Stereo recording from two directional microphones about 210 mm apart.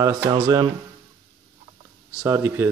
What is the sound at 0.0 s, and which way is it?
Speech, 15° right (ahead or behind).